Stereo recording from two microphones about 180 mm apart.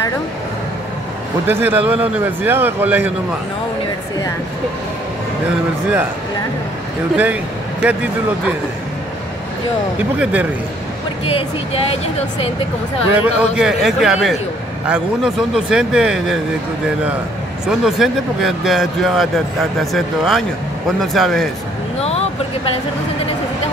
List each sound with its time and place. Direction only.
1.5 s a man's voice: 10° right (ahead or behind)
7.8 s a man's voice: 10° right (ahead or behind)
10.1 s a man's voice: 10° right (ahead or behind)
11.2 s speech: 30° left (ahead or behind)
13.1 s speech: 10° right (ahead or behind)
17.6 s speech: centre (ahead or behind)